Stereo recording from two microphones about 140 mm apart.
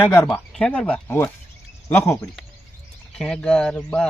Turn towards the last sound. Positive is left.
turn(degrees=10)  # may be behind; listen again after turning